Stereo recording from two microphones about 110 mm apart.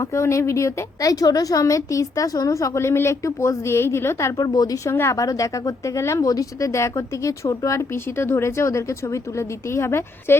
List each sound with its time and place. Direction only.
0.0 s a woman's voice: 25° left (ahead or behind)